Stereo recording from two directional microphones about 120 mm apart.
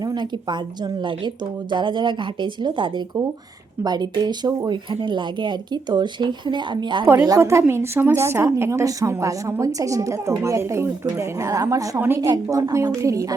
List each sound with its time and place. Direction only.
0.0 s speech: 35° right (ahead or behind)
7.0 s a woman's voice: 25° right (ahead or behind)
11.9 s a woman's voice: 15° right (ahead or behind)
12.2 s a woman's voice: 30° right (ahead or behind)